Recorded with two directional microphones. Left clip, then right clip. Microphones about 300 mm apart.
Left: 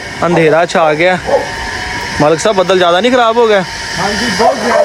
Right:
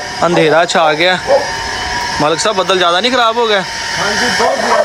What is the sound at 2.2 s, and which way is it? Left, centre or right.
Speech, centre.